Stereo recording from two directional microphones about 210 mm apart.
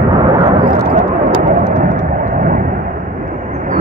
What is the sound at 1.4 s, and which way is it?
Thunder, 40° right (ahead or behind).